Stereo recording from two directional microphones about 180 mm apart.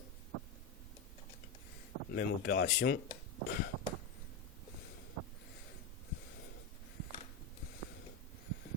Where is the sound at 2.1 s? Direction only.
60° left (ahead or behind).